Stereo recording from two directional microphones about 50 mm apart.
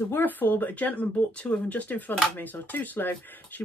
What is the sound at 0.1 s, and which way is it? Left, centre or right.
Speech, left.